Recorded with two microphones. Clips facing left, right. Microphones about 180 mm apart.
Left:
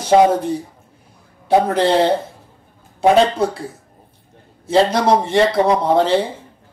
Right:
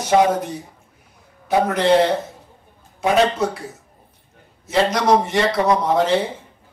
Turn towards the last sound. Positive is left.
turn(degrees=30)  # may be behind; listen again after turning